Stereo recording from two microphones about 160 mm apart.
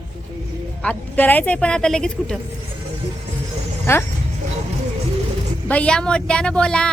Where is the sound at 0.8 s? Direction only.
10° left (ahead or behind).